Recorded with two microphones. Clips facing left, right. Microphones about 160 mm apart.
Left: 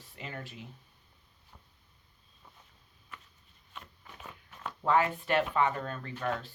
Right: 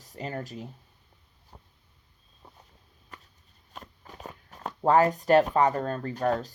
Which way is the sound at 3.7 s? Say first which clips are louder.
Right 4 dB; 40° right (ahead or behind).